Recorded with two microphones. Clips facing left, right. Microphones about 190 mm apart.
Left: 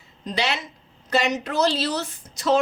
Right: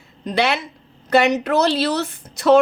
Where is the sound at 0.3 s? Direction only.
60° right (ahead or behind).